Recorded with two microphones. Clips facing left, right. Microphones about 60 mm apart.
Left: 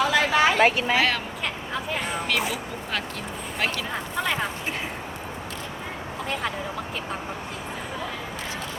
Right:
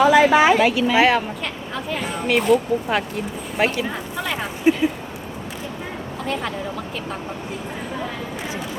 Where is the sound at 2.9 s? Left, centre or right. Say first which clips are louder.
Right 7 dB; right.